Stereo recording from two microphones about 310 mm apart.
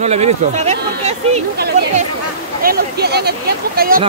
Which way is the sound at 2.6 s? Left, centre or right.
Right.